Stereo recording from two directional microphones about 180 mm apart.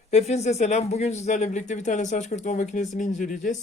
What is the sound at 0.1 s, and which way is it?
Speech, 35° left (ahead or behind).